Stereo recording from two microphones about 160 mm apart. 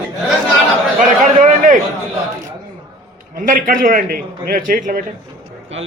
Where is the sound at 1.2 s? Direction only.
55° right (ahead or behind).